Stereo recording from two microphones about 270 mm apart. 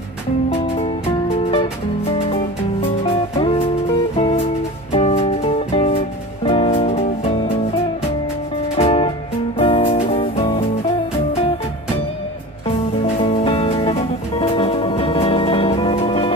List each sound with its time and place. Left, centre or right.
0.5 s music: left
8.7 s music: left
13.0 s music: left